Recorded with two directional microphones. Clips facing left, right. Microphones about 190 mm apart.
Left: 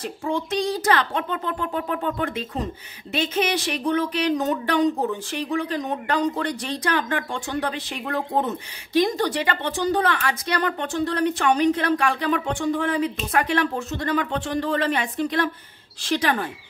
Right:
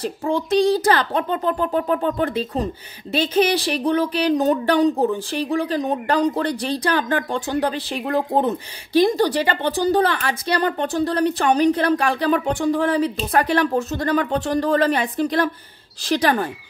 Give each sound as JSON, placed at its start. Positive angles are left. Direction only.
{"t": 0.0, "sound": "speech", "side_deg": -35}